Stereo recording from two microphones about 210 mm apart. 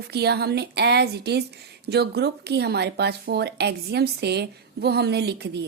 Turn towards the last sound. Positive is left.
turn(degrees=-50)  # may be behind; listen again after turning